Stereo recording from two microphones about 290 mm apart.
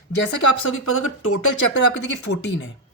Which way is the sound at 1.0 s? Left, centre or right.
Left.